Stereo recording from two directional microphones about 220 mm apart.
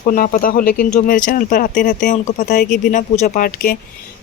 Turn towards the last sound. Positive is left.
turn(degrees=40)  # may be behind; listen again after turning